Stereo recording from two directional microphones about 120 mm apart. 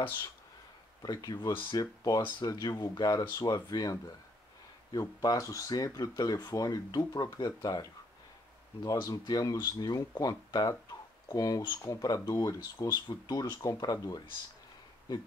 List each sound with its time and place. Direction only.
1.0 s speech: 35° left (ahead or behind)
5.2 s speech: 30° left (ahead or behind)